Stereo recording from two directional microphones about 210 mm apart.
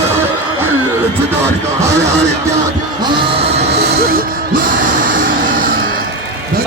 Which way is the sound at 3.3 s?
30° right (ahead or behind).